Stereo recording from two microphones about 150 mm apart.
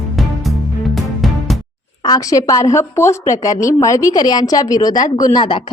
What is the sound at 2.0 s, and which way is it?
A woman's voice, 25° left (ahead or behind).